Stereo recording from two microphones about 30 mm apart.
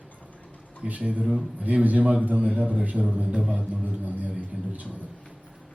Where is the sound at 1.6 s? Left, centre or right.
Right.